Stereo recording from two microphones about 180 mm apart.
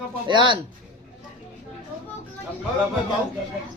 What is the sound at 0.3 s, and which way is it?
Speech, 25° right (ahead or behind).